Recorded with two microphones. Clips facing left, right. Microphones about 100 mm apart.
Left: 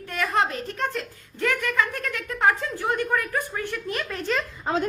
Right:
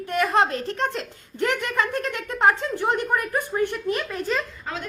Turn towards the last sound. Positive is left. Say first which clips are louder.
# left 7 dB
turn(degrees=30)  # may be behind; listen again after turning